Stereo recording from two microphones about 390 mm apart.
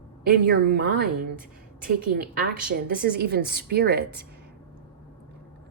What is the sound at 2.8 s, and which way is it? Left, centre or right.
Speech, right.